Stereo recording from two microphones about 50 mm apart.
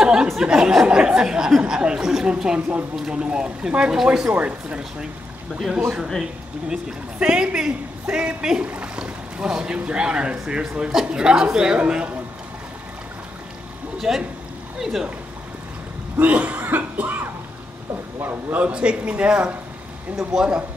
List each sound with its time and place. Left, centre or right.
0.0 s a sound: centre
0.4 s a man's voice: centre
6.7 s a man's voice: centre
8.6 s cough: right
8.9 s boat: centre
9.8 s a man's voice: right
13.9 s a man's voice: centre
16.2 s cough: right
16.6 s music: right
18.2 s cough: right
18.7 s speech: right
20.3 s a man's voice: centre